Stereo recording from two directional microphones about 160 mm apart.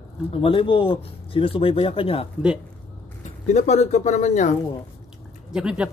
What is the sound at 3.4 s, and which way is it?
Speech, 45° left (ahead or behind).